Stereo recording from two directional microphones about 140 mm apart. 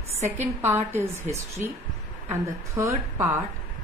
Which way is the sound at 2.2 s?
20° right (ahead or behind).